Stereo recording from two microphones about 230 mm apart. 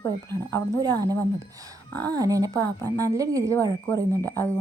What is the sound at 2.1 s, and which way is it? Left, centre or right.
A woman's voice, centre.